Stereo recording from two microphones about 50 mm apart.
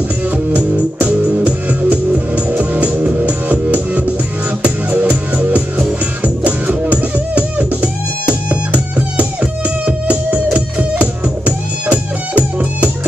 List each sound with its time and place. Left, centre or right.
1.0 s music: centre